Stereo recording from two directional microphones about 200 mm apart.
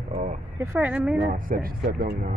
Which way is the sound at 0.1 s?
35° right (ahead or behind).